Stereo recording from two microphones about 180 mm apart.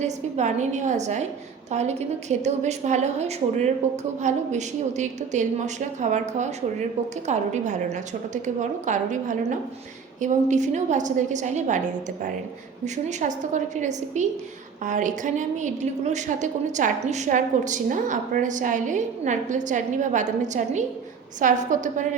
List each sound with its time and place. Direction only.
0.0 s a woman's voice: 40° right (ahead or behind)
8.9 s a woman's voice: 45° right (ahead or behind)
12.8 s a woman's voice: 40° right (ahead or behind)